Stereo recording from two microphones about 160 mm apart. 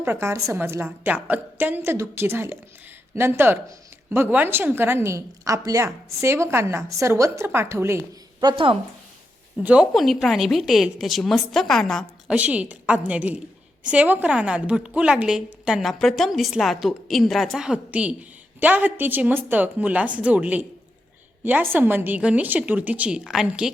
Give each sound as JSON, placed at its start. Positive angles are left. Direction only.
{"t": 0.0, "sound": "a woman's voice", "side_deg": -15}
{"t": 9.6, "sound": "a woman's voice", "side_deg": -5}
{"t": 12.4, "sound": "a woman's voice", "side_deg": -10}